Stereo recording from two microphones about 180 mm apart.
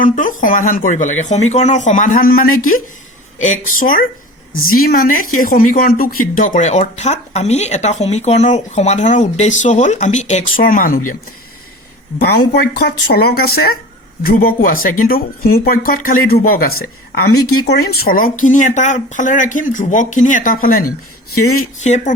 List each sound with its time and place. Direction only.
0.0 s speech: 50° left (ahead or behind)
12.8 s speech: 60° left (ahead or behind)
21.8 s speech: 40° left (ahead or behind)